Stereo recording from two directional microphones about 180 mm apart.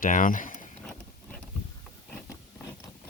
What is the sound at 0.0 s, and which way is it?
Speech, 50° left (ahead or behind).